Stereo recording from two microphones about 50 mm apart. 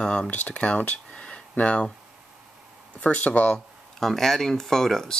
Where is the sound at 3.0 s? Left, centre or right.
Left.